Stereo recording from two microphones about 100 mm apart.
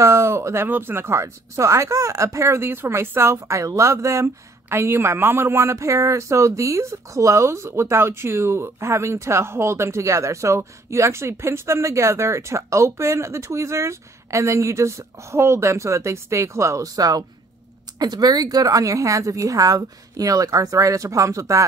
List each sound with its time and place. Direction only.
0.0 s a woman's voice: 30° right (ahead or behind)